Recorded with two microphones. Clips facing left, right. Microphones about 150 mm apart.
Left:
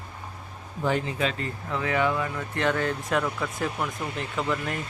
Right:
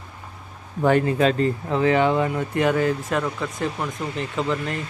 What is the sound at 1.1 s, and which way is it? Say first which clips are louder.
Speech: right 9 dB; 40° right (ahead or behind).